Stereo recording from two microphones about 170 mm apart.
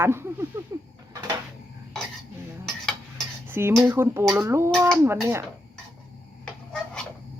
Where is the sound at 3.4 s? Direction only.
15° right (ahead or behind).